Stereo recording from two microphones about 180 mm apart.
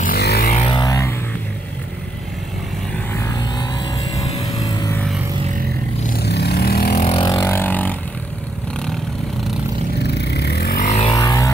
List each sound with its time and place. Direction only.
0.0 s a sound: 60° left (ahead or behind)
0.7 s music: 20° left (ahead or behind)
3.1 s vehicle: 15° left (ahead or behind)
6.1 s vehicle: 65° left (ahead or behind)
7.0 s vehicle: 35° left (ahead or behind)
7.2 s vehicle: 15° left (ahead or behind)
10.1 s vehicle: 70° left (ahead or behind)
10.9 s vehicle: 35° left (ahead or behind)
11.1 s a sound: 20° left (ahead or behind)